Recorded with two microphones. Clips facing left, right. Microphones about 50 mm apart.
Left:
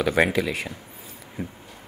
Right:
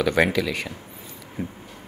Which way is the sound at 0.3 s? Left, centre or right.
Left.